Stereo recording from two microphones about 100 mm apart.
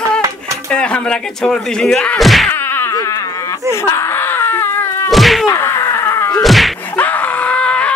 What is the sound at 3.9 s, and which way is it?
Wail, 25° left (ahead or behind).